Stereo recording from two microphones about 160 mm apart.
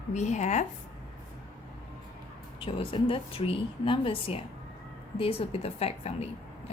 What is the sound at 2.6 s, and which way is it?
A woman's voice, 35° left (ahead or behind).